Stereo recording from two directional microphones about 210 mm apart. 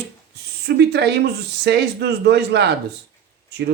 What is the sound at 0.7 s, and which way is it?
Speech, 50° right (ahead or behind).